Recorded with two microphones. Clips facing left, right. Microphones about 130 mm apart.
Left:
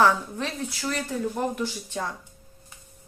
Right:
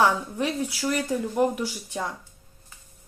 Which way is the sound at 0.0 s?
15° right (ahead or behind).